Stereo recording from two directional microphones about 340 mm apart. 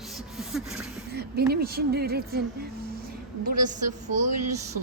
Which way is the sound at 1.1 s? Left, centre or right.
Right.